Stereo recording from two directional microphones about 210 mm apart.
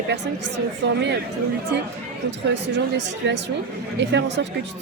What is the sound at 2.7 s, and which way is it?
A woman's voice, 55° right (ahead or behind).